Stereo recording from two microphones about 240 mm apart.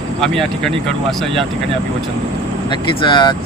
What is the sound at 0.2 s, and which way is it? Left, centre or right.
Speech, centre.